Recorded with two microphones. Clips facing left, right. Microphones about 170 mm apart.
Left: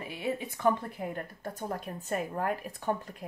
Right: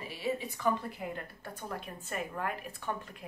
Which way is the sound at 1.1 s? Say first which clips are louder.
Left 4 dB; 40° left (ahead or behind).